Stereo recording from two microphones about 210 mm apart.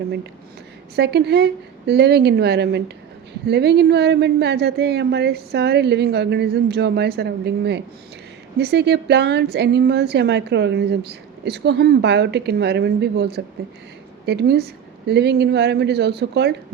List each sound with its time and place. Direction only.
0.9 s a woman's voice: 50° right (ahead or behind)